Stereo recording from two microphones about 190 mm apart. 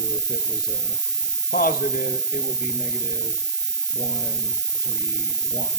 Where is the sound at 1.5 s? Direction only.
50° left (ahead or behind).